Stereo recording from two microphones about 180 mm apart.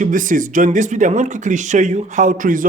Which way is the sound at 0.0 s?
45° right (ahead or behind).